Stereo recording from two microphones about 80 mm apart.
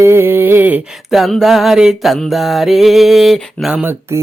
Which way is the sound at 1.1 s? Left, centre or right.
Centre.